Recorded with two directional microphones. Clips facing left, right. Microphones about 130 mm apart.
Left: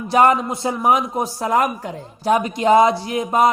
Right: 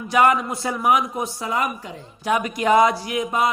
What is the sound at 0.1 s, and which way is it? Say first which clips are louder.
Speech: left 3 dB; 30° left (ahead or behind).